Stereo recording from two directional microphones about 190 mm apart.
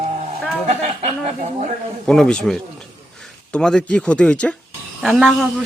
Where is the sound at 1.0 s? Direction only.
35° right (ahead or behind).